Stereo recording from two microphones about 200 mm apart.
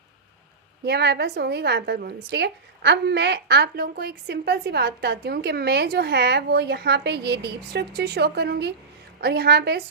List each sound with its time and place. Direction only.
0.9 s a woman's voice: 55° right (ahead or behind)